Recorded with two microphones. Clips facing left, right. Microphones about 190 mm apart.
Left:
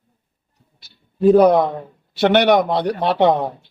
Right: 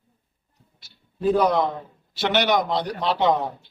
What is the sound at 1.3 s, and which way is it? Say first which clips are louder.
A man's voice: left 6 dB; 55° left (ahead or behind).